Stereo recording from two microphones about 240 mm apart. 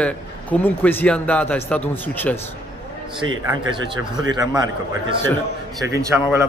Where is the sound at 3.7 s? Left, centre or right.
Centre.